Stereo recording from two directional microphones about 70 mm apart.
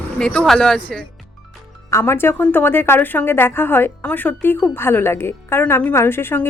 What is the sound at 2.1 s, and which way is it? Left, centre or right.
A woman's voice, left.